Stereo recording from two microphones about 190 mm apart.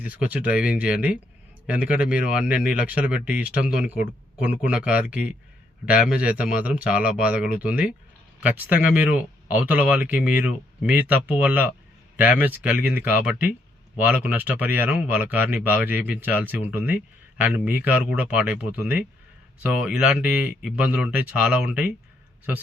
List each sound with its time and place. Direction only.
0.0 s speech: 5° right (ahead or behind)